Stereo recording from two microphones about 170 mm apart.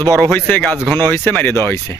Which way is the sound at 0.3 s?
10° left (ahead or behind).